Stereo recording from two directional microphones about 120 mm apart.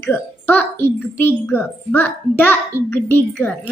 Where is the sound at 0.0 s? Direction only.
15° left (ahead or behind).